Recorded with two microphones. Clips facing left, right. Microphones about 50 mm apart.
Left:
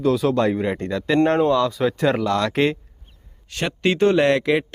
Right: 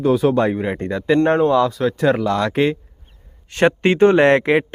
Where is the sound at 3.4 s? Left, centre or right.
Right.